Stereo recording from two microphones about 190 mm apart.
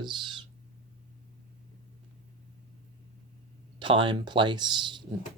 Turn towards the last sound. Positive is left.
turn(degrees=-25)  # may be behind; listen again after turning